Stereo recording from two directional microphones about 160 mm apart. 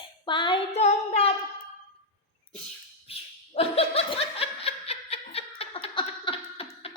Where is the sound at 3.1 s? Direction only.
40° left (ahead or behind).